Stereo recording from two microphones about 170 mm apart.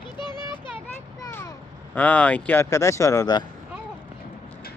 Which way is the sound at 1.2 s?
15° left (ahead or behind).